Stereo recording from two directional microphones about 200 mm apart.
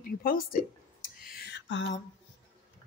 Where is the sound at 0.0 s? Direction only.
45° left (ahead or behind); by 2.0 s 60° left (ahead or behind).